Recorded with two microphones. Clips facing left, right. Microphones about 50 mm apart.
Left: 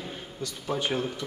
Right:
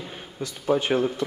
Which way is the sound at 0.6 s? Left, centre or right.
Right.